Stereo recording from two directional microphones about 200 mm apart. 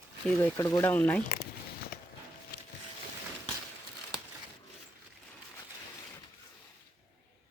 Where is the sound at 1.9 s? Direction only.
45° left (ahead or behind).